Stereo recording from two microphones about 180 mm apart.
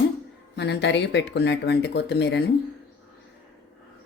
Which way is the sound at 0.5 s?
70° left (ahead or behind).